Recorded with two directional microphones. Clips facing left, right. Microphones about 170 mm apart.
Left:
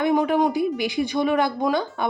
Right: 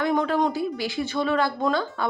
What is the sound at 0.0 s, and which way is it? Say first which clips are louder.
A woman's voice: left 3 dB; 15° left (ahead or behind).